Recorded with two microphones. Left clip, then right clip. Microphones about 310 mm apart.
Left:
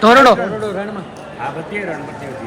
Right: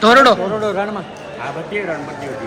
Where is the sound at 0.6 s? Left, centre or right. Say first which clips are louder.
Right 3 dB; right.